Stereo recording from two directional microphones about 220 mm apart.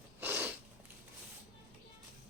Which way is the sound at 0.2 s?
10° right (ahead or behind).